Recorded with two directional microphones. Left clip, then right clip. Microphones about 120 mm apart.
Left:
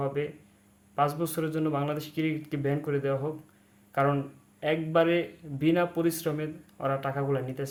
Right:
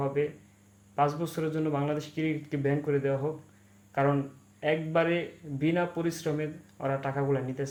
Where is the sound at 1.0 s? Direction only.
30° left (ahead or behind).